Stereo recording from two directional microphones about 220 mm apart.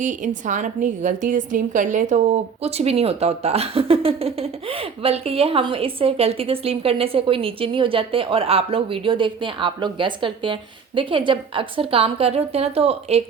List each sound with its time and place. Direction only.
0.0 s a woman's voice: 35° right (ahead or behind)